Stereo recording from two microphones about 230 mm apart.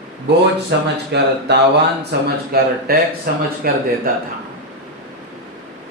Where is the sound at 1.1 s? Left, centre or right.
Right.